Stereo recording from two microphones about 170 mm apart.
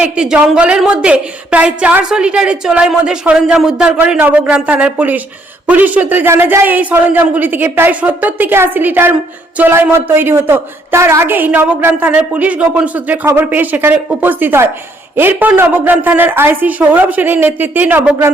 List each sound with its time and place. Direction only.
0.0 s a woman's voice: 5° right (ahead or behind)